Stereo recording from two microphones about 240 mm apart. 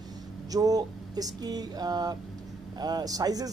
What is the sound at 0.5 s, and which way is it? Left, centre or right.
A man's voice, centre.